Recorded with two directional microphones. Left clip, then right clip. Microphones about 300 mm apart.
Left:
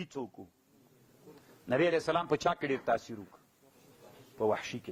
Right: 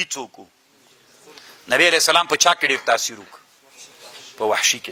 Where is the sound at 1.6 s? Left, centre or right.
Centre.